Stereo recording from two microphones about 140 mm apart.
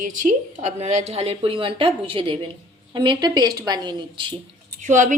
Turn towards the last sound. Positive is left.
turn(degrees=-60)  # may be behind; listen again after turning